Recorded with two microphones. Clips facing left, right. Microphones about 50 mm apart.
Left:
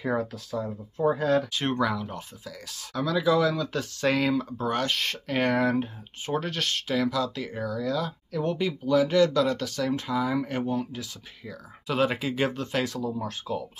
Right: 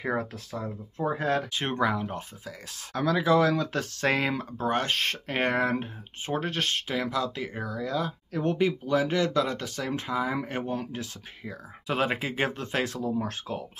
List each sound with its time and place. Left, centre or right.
0.2 s speech: right
1.5 s speech: right
10.7 s speech: right